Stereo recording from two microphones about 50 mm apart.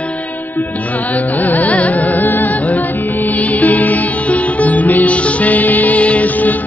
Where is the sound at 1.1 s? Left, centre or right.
Left.